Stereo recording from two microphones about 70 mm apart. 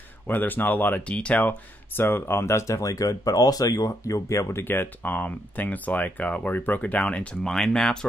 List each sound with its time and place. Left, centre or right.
0.3 s speech: left
7.4 s speech: centre